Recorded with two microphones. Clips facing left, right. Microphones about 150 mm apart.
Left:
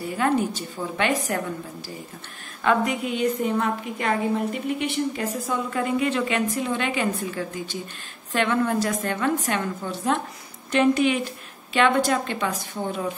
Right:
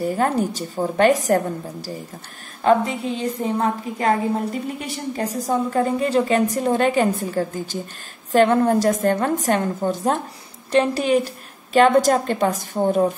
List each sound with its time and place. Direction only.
0.0 s a woman's voice: 40° right (ahead or behind)